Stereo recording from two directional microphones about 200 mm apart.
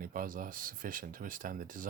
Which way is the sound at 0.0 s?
45° right (ahead or behind).